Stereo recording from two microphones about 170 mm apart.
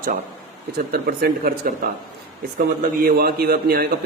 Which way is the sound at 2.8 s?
55° right (ahead or behind).